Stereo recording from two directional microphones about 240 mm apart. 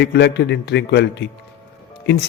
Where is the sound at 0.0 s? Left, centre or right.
Left.